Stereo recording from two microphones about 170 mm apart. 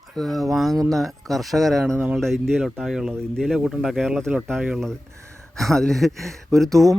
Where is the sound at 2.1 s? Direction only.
Centre (ahead or behind).